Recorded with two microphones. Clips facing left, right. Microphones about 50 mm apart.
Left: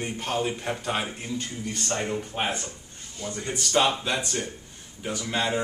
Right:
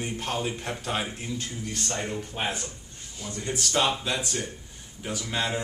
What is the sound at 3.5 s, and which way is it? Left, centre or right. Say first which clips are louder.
A man's voice: left 2 dB; centre.